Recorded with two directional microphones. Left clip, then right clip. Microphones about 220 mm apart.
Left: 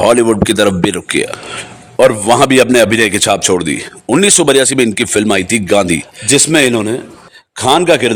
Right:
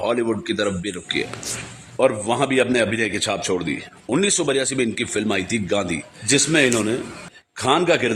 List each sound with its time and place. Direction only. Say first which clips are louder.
0.0 s a man's voice: left 13 dB; 45° left (ahead or behind)